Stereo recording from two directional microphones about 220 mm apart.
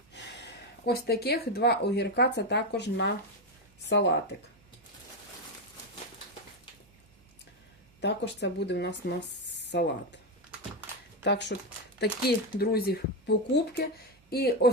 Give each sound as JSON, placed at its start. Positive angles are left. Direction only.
{"t": 0.9, "sound": "speech", "side_deg": 45}
{"t": 8.0, "sound": "speech", "side_deg": 50}
{"t": 11.2, "sound": "speech", "side_deg": 50}